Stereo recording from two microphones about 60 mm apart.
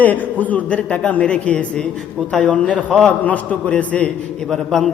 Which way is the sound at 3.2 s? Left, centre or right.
Left.